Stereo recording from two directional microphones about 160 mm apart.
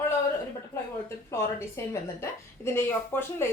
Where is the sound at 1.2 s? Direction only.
15° left (ahead or behind).